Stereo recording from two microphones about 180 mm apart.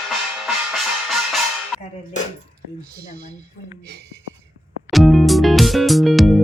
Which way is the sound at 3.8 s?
65° right (ahead or behind).